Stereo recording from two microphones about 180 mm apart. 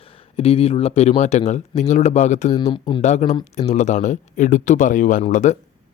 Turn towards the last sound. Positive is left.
turn(degrees=40)  # may be behind; listen again after turning